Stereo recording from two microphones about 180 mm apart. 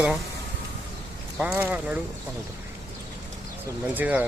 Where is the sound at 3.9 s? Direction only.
10° right (ahead or behind).